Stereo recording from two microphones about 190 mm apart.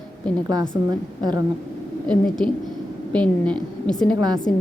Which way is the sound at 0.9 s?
20° right (ahead or behind).